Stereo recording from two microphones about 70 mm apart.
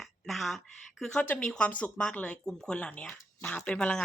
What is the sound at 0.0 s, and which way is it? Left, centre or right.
Speech, centre.